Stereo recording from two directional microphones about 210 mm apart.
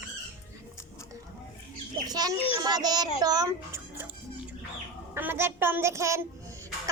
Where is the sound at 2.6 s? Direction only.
20° right (ahead or behind).